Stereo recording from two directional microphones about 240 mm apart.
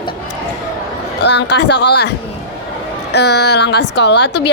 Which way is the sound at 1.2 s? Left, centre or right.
Left.